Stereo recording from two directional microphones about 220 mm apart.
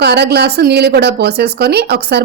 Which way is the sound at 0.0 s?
50° right (ahead or behind).